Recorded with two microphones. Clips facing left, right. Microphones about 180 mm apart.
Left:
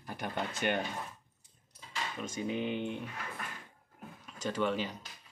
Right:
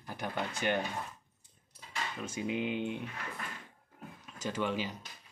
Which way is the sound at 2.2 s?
10° right (ahead or behind).